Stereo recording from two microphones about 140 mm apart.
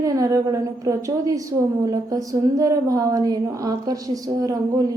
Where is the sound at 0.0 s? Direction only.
25° right (ahead or behind).